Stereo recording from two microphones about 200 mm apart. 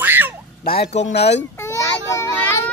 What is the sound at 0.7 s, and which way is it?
Speech, 55° left (ahead or behind).